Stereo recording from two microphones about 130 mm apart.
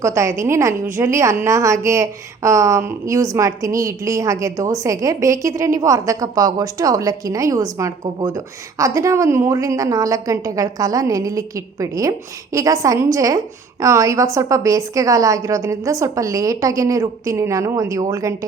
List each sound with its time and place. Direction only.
0.0 s a woman's voice: 25° right (ahead or behind)